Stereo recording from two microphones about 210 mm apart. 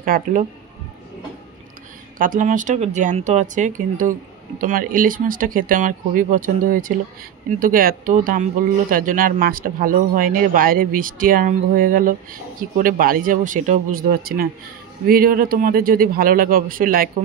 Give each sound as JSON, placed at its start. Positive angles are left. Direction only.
{"t": 0.0, "sound": "speech", "side_deg": -40}
{"t": 2.1, "sound": "speech", "side_deg": -40}